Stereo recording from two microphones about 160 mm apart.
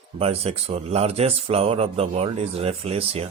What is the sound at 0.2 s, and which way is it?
Speech, 40° right (ahead or behind).